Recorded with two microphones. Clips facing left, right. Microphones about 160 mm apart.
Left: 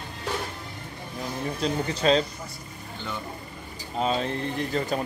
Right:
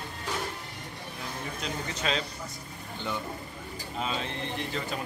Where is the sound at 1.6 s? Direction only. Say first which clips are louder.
Left 10 dB; 35° left (ahead or behind).